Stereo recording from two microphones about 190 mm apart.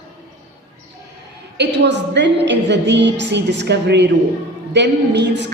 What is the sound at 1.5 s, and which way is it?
A woman's voice, 65° right (ahead or behind).